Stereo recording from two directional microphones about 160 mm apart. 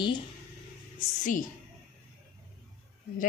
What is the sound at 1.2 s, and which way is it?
Speech, 55° left (ahead or behind).